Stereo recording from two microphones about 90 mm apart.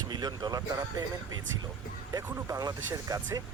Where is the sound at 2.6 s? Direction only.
45° right (ahead or behind).